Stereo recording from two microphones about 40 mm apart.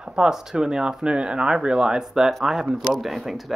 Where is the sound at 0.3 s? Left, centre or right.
Centre.